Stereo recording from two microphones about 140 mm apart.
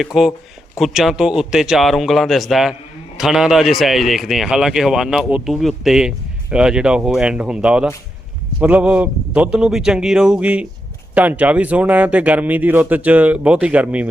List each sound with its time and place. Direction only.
0.0 s speech: centre (ahead or behind)